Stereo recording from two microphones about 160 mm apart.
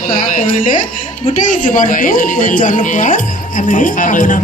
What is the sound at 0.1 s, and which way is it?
Speech, 60° left (ahead or behind).